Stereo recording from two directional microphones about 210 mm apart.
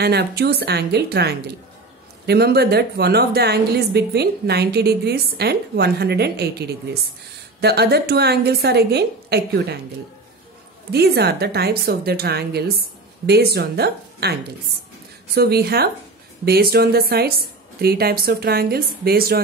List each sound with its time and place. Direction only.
0.0 s a woman's voice: 50° right (ahead or behind)
10.9 s a woman's voice: 50° right (ahead or behind)
15.3 s a woman's voice: 50° right (ahead or behind)